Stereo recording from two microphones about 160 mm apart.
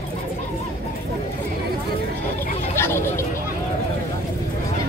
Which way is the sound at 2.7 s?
15° left (ahead or behind).